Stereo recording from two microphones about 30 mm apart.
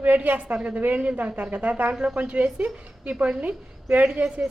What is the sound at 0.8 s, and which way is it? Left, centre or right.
Speech, right.